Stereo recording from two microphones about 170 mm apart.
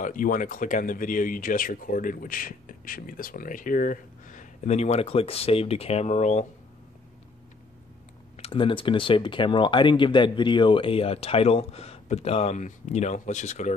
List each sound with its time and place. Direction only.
0.0 s speech: 50° left (ahead or behind)
8.4 s speech: 30° left (ahead or behind)